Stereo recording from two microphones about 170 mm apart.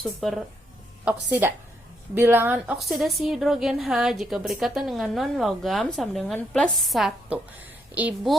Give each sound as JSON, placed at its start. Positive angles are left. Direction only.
{"t": 0.0, "sound": "a woman's voice", "side_deg": 0}
{"t": 1.0, "sound": "speech", "side_deg": -10}
{"t": 2.8, "sound": "a woman's voice", "side_deg": 0}